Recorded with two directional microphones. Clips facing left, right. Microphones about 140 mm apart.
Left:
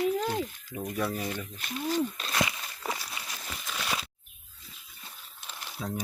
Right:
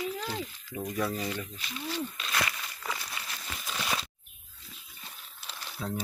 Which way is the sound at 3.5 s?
Centre (ahead or behind).